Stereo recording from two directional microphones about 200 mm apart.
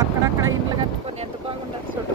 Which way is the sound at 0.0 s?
15° right (ahead or behind).